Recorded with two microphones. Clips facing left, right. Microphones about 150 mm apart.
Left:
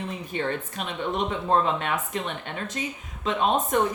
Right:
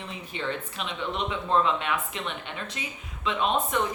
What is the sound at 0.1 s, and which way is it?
Speech, 50° left (ahead or behind).